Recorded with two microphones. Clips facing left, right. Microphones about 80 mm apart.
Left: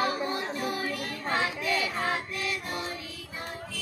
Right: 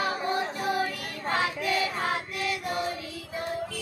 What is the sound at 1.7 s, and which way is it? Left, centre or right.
Choir, right.